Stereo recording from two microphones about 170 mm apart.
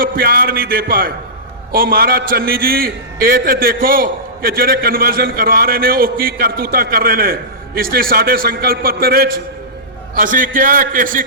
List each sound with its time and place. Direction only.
0.0 s a man's voice: 60° right (ahead or behind)